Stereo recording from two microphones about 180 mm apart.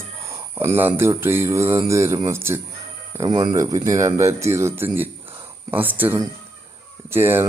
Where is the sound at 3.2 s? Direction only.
25° right (ahead or behind).